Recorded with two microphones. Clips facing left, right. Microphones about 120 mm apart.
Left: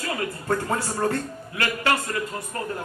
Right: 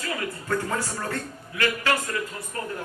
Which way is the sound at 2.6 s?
35° left (ahead or behind).